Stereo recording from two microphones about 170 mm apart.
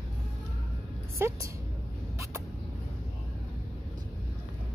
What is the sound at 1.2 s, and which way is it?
Speech, 15° right (ahead or behind).